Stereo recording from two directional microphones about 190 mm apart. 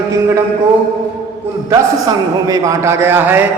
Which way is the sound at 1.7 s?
20° right (ahead or behind).